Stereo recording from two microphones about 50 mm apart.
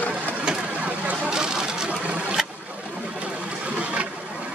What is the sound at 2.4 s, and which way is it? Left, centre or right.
Boat, centre.